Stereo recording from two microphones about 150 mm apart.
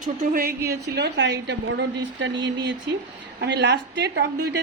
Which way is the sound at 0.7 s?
90° right.